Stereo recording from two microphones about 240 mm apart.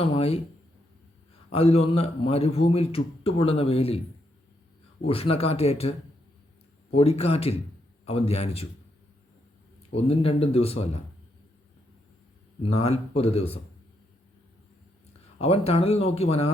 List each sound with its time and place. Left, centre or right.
0.0 s a man's voice: left
1.5 s a man's voice: left
5.0 s a man's voice: left
6.9 s a man's voice: left
9.9 s a man's voice: left
12.6 s a man's voice: left
15.4 s a man's voice: left